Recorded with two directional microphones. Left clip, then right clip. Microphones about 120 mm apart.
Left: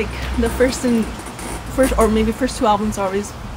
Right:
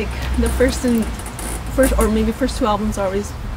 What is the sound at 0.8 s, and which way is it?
Speech, 20° left (ahead or behind).